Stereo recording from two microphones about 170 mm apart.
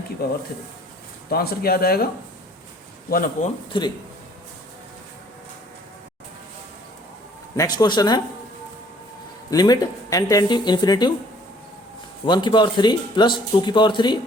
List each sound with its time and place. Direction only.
0.2 s speech: 70° left (ahead or behind)
3.1 s speech: 55° left (ahead or behind)
3.7 s speech: 25° left (ahead or behind)
7.5 s speech: 20° left (ahead or behind)
9.5 s speech: 20° left (ahead or behind)
12.2 s speech: 25° left (ahead or behind)